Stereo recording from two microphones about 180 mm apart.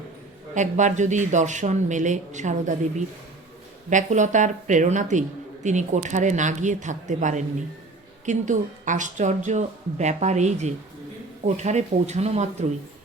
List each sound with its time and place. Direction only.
0.5 s speech: 40° right (ahead or behind)
3.8 s speech: 40° right (ahead or behind)